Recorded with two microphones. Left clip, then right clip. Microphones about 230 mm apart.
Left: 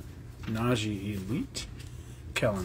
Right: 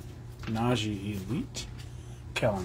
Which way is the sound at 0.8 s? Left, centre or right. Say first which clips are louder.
Even; centre.